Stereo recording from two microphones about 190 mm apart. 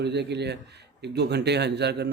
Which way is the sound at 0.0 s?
65° right (ahead or behind).